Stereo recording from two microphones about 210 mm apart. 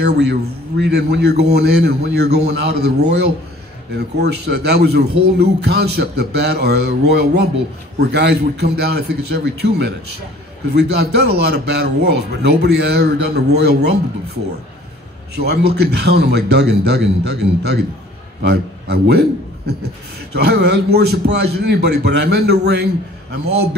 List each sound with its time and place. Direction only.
0.0 s speech: 55° right (ahead or behind)
15.3 s speech: 50° right (ahead or behind)
18.4 s a man's voice: 50° right (ahead or behind)